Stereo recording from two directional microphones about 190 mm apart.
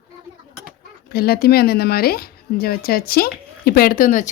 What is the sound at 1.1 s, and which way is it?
Speech, 55° left (ahead or behind).